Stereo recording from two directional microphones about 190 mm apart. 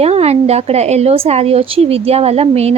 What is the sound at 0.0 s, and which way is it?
Speech, 35° right (ahead or behind).